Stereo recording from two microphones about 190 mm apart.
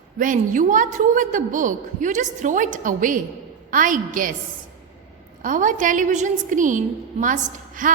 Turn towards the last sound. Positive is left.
turn(degrees=-45)  # may be behind; listen again after turning